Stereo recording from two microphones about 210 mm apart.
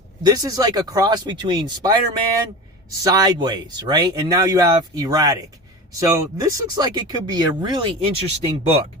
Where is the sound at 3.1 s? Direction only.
20° right (ahead or behind).